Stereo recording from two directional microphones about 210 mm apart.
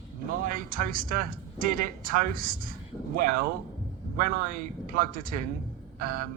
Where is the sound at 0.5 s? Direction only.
40° right (ahead or behind).